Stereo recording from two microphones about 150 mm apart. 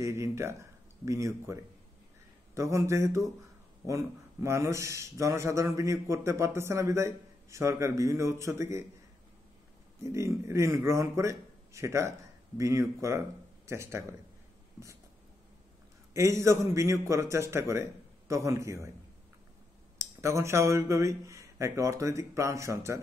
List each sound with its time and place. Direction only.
0.0 s speech: 20° right (ahead or behind)
10.0 s speech: 20° right (ahead or behind)
16.1 s speech: 20° right (ahead or behind)
20.0 s speech: 20° right (ahead or behind)